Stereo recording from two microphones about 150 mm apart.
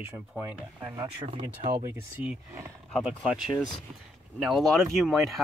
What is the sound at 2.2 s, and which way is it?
Speech, 10° right (ahead or behind).